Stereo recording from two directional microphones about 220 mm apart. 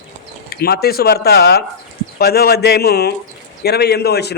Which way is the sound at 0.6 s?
45° left (ahead or behind).